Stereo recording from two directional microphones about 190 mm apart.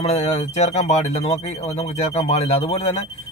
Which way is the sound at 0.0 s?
35° left (ahead or behind).